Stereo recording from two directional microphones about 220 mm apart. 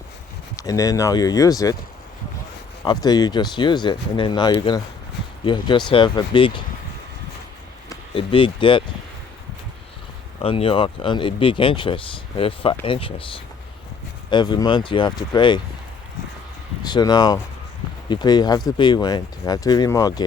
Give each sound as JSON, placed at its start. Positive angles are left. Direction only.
{"t": 0.5, "sound": "speech", "side_deg": 15}
{"t": 2.8, "sound": "speech", "side_deg": 20}
{"t": 7.9, "sound": "speech", "side_deg": 25}
{"t": 10.4, "sound": "speech", "side_deg": 25}
{"t": 16.8, "sound": "speech", "side_deg": 20}